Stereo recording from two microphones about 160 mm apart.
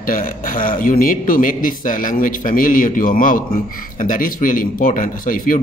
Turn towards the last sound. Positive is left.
turn(degrees=60)  # may be behind; listen again after turning